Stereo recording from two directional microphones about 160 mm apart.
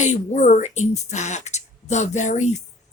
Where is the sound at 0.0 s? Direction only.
50° left (ahead or behind).